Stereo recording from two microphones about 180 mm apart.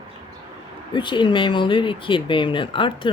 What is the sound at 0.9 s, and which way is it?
Speech, 25° left (ahead or behind).